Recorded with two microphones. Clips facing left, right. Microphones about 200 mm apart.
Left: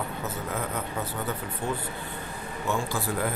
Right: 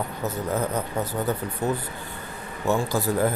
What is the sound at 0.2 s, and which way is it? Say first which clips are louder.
Speech: right 9 dB; 40° right (ahead or behind).